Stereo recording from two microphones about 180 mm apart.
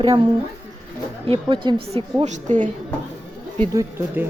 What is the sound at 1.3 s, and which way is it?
Speech, 30° right (ahead or behind).